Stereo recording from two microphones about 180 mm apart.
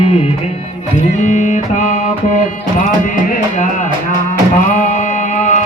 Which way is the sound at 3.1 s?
45° left (ahead or behind).